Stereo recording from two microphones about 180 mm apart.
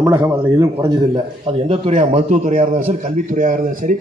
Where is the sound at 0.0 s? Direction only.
15° right (ahead or behind).